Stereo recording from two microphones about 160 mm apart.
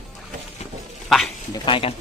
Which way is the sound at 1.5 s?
30° left (ahead or behind).